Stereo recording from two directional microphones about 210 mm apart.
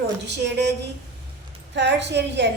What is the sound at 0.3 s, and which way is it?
Speech, 55° right (ahead or behind).